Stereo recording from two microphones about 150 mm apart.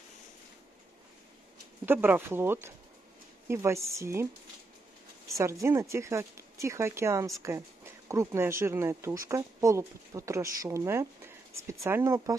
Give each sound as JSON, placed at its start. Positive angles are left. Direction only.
{"t": 1.9, "sound": "speech", "side_deg": -15}
{"t": 5.4, "sound": "speech", "side_deg": -20}